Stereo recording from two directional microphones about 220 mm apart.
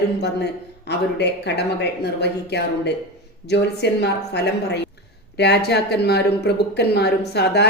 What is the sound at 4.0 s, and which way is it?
Speech, 50° left (ahead or behind).